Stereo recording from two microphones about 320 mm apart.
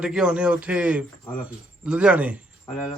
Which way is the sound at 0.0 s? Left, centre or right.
Centre.